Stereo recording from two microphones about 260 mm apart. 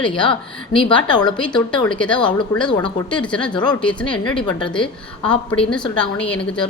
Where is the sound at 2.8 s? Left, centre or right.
Centre.